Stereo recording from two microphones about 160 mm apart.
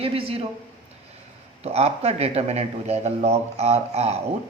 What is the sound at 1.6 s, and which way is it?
Speech, 40° right (ahead or behind).